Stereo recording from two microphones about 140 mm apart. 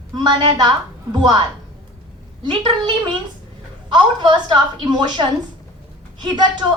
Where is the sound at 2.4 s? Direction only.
35° right (ahead or behind).